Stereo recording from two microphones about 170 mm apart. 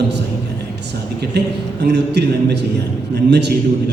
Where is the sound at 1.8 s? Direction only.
85° right.